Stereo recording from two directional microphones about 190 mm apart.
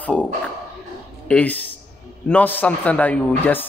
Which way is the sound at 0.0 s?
10° left (ahead or behind).